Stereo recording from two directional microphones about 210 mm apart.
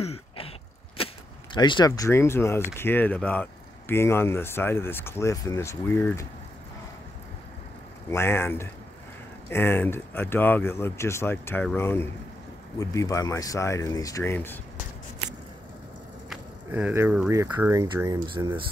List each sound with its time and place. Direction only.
0.0 s throat clearing: 30° left (ahead or behind)
0.9 s speech: 25° left (ahead or behind)
8.1 s speech: 10° left (ahead or behind)
16.3 s a sound: 5° right (ahead or behind)
17.3 s speech: 15° right (ahead or behind)